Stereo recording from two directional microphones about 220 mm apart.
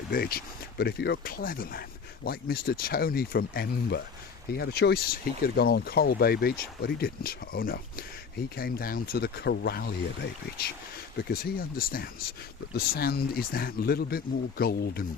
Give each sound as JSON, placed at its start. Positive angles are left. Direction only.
{"t": 0.1, "sound": "speech", "side_deg": 45}
{"t": 11.8, "sound": "speech", "side_deg": 40}